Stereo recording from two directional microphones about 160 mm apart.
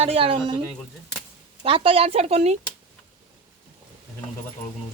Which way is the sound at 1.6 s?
35° right (ahead or behind).